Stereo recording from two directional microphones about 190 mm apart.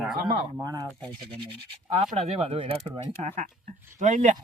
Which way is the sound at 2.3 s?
30° right (ahead or behind).